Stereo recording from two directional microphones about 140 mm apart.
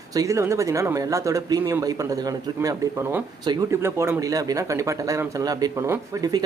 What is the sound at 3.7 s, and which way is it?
Speech, 20° right (ahead or behind).